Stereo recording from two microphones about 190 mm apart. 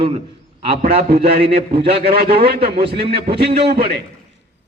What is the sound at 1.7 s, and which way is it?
Speech, 30° right (ahead or behind).